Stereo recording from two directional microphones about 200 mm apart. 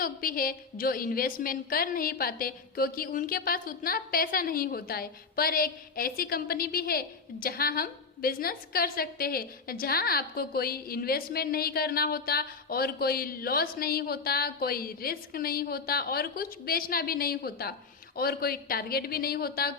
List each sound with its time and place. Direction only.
0.0 s a woman's voice: 45° left (ahead or behind)